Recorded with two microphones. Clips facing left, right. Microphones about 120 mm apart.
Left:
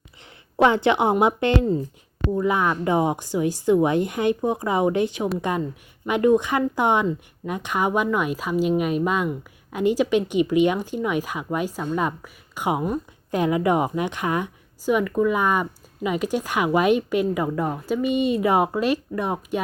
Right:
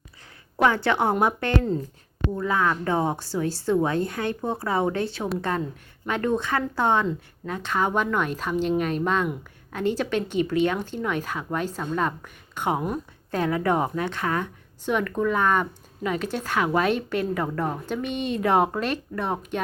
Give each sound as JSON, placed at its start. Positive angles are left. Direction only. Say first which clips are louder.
{"t": 0.5, "sound": "a woman's voice", "louder": "left 4 dB", "side_deg": 20}
{"t": 13.3, "sound": "a woman's voice", "louder": "left 3 dB", "side_deg": 15}